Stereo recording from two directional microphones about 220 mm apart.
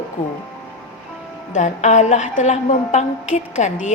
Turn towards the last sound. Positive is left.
turn(degrees=35)  # may be behind; listen again after turning